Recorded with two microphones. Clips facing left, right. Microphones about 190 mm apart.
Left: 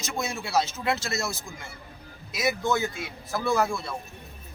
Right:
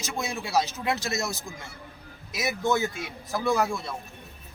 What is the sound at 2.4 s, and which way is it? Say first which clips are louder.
A man's voice: even; 20° right (ahead or behind).